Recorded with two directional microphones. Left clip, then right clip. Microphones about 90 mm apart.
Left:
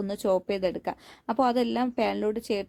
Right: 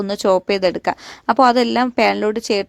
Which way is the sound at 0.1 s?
40° right (ahead or behind).